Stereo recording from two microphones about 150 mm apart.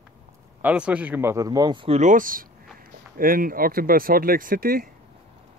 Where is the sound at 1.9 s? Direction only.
60° right (ahead or behind); by 4.9 s 75° right (ahead or behind).